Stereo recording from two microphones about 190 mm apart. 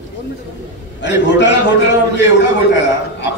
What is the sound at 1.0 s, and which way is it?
A man's voice, 70° left (ahead or behind).